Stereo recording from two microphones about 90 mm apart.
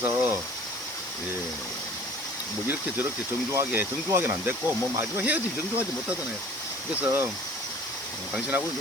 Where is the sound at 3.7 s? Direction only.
25° right (ahead or behind).